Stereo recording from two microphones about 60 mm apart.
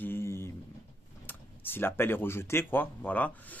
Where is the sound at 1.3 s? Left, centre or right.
Left.